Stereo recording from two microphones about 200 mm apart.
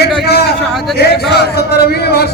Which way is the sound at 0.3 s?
50° left (ahead or behind).